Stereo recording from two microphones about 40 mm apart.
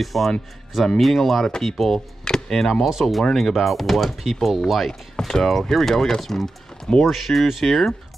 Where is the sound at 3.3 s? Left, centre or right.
Centre.